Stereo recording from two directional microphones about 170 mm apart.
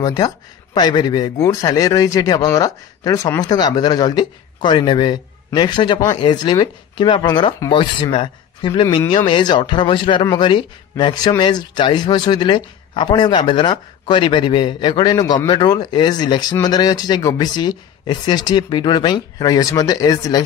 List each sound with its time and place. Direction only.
0.0 s speech: 20° left (ahead or behind)
8.8 s speech: 20° left (ahead or behind)